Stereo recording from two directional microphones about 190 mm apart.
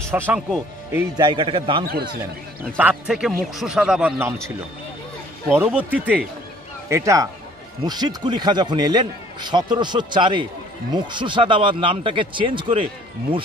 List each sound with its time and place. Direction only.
0.3 s speech: 5° right (ahead or behind)
1.1 s a man's voice: 25° right (ahead or behind)
2.8 s a man's voice: 5° right (ahead or behind)
5.5 s a man's voice: 10° right (ahead or behind); by 12.8 s 25° right (ahead or behind)